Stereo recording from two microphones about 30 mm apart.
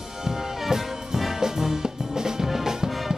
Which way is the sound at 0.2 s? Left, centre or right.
Centre.